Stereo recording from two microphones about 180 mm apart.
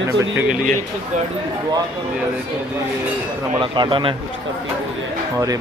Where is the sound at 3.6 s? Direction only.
25° right (ahead or behind).